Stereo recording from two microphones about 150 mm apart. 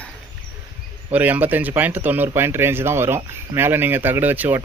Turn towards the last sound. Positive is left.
turn(degrees=-10)  # may be behind; listen again after turning